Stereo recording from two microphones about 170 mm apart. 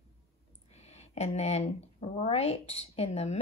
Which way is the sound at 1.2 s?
40° left (ahead or behind).